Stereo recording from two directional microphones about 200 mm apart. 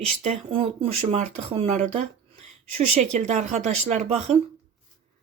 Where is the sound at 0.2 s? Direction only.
30° right (ahead or behind).